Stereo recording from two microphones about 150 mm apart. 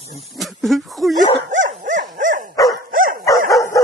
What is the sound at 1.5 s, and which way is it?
Dog, 60° right (ahead or behind).